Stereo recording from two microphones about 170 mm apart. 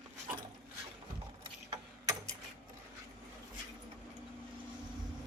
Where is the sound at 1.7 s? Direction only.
20° right (ahead or behind).